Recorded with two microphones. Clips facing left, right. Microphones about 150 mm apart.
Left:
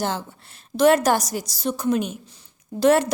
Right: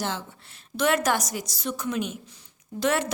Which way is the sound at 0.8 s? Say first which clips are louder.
Left 7 dB; 35° left (ahead or behind).